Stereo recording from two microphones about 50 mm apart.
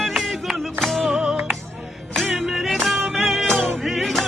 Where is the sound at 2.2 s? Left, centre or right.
Centre.